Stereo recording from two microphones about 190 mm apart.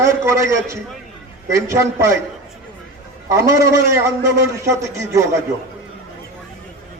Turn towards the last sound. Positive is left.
turn(degrees=-15)  # may be behind; listen again after turning